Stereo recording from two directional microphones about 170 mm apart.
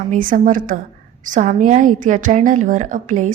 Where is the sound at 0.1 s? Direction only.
55° right (ahead or behind).